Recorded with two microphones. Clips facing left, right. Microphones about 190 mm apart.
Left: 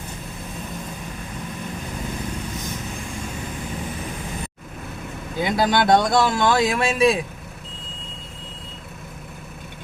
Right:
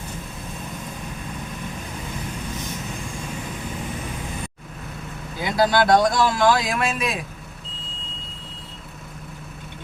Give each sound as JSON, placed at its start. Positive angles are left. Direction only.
{"t": 5.4, "sound": "speech", "side_deg": 20}